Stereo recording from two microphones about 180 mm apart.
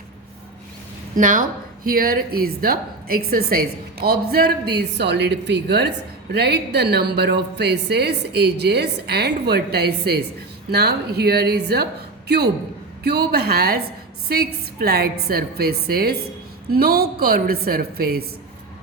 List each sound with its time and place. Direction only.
1.1 s a woman's voice: 45° right (ahead or behind)